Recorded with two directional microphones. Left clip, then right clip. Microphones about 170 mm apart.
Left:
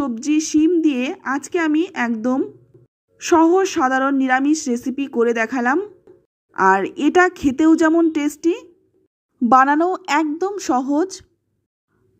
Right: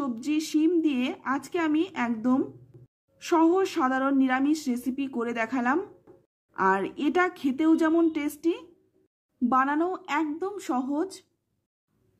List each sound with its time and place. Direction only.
0.0 s a woman's voice: 25° left (ahead or behind)